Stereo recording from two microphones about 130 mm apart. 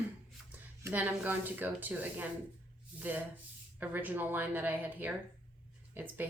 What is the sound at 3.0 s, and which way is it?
Rub, 15° right (ahead or behind).